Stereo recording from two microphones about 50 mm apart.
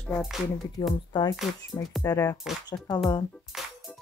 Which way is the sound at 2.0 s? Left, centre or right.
Left.